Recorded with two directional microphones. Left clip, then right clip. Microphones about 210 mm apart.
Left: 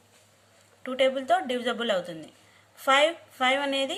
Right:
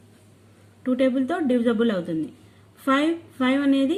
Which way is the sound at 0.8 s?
30° left (ahead or behind).